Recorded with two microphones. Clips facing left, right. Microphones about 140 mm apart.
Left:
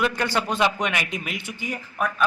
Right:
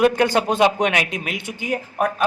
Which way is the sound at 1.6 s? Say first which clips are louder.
Right 6 dB; 45° right (ahead or behind).